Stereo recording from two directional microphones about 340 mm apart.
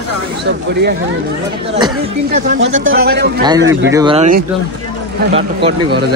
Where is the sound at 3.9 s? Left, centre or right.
Centre.